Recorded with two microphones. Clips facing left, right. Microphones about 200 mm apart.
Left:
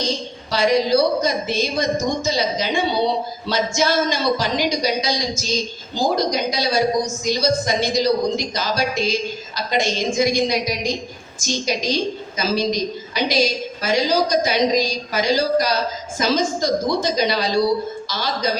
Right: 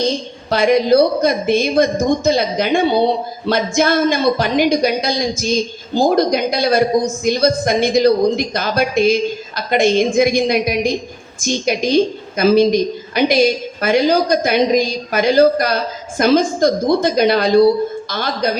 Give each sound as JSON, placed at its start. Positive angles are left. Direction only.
{"t": 0.5, "sound": "a woman's voice", "side_deg": -55}